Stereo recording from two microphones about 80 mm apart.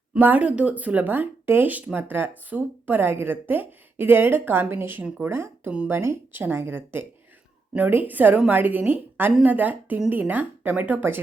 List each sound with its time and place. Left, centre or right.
0.1 s speech: centre